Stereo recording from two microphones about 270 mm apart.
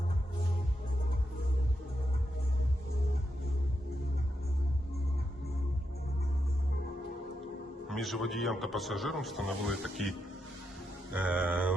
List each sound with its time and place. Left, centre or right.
7.9 s speech: centre